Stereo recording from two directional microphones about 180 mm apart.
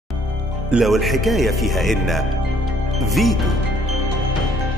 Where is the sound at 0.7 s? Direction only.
Centre (ahead or behind).